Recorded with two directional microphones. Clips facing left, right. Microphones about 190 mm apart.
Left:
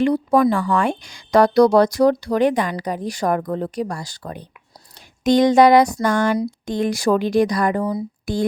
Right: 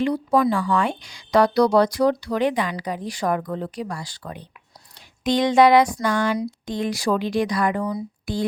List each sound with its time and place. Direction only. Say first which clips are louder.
0.0 s speech: left 4 dB; 50° left (ahead or behind)